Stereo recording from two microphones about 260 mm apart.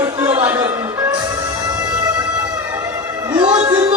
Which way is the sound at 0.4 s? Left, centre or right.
Centre.